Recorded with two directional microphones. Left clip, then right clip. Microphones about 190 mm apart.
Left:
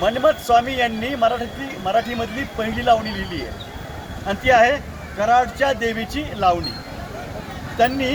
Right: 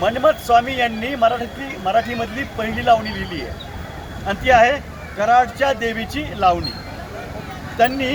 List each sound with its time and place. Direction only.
0.0 s a man's voice: centre (ahead or behind)
7.8 s a man's voice: centre (ahead or behind)